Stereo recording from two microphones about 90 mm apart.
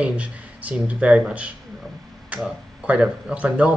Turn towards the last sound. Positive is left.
turn(degrees=-15)  # may be behind; listen again after turning